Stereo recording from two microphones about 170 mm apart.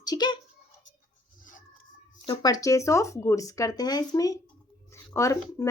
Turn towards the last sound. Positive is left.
turn(degrees=15)  # may be behind; listen again after turning